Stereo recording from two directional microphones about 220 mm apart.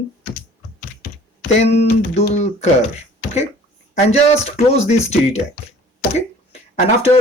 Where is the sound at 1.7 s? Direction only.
45° left (ahead or behind).